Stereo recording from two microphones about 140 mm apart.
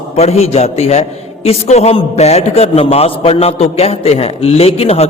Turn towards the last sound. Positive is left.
turn(degrees=45)  # may be behind; listen again after turning